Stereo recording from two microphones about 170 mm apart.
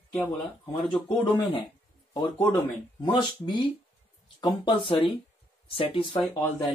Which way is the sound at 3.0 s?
25° left (ahead or behind).